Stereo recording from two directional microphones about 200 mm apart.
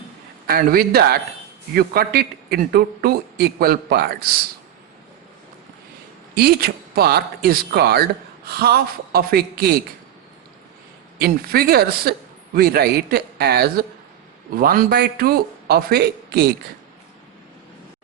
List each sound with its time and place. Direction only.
0.4 s a man's voice: 50° right (ahead or behind)
6.3 s a man's voice: 50° right (ahead or behind)
11.2 s a man's voice: 50° right (ahead or behind)